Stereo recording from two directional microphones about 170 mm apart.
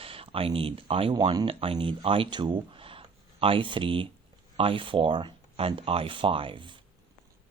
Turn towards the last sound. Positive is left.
turn(degrees=-30)  # may be behind; listen again after turning